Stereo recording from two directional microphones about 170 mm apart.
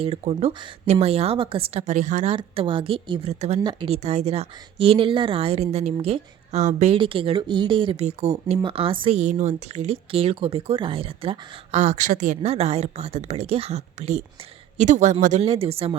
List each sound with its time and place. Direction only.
0.0 s speech: 35° right (ahead or behind)
2.3 s speech: 30° right (ahead or behind)
3.6 s speech: 25° right (ahead or behind)